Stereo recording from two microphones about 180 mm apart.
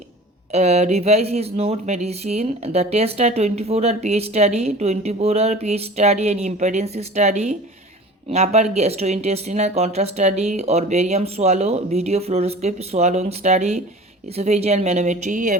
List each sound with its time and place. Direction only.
0.5 s speech: 35° right (ahead or behind)